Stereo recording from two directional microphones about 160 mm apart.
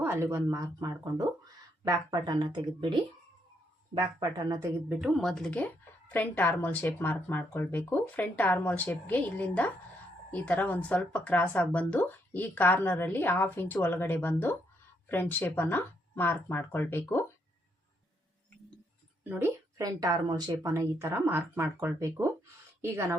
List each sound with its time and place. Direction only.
0.0 s a woman's voice: 15° right (ahead or behind)
4.0 s a woman's voice: 20° right (ahead or behind)
4.9 s a woman's voice: centre (ahead or behind)
19.3 s a woman's voice: 15° right (ahead or behind)